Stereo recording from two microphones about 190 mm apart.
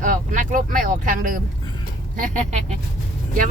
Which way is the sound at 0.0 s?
40° right (ahead or behind).